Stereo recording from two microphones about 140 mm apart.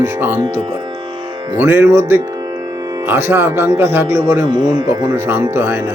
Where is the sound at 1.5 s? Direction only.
20° right (ahead or behind).